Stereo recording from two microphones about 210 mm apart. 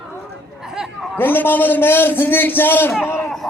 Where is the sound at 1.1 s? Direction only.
10° left (ahead or behind).